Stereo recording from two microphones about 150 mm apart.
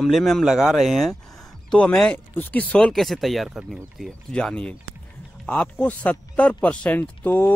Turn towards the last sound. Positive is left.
turn(degrees=10)  # may be behind; listen again after turning